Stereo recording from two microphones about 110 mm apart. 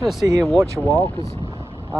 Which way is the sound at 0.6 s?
25° right (ahead or behind).